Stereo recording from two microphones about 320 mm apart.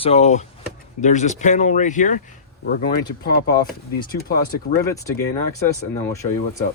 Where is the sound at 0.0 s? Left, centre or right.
Centre.